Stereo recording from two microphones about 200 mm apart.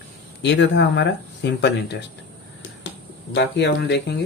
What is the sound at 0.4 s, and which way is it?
Speech, 60° left (ahead or behind).